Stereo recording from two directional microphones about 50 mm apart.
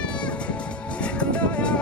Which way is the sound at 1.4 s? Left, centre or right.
Left.